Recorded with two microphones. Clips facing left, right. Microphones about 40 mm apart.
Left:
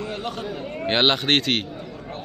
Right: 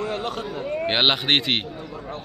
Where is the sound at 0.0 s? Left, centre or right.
Right.